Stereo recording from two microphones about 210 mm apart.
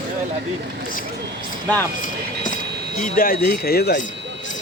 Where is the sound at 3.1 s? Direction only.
45° left (ahead or behind).